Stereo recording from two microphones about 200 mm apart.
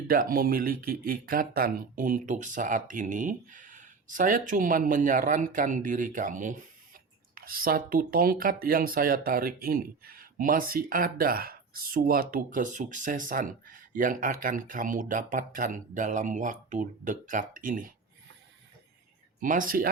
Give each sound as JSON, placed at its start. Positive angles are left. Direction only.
{"t": 0.1, "sound": "speech", "side_deg": -45}
{"t": 19.4, "sound": "speech", "side_deg": -40}